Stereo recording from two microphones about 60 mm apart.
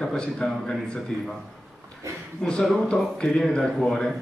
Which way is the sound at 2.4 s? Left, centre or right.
Centre.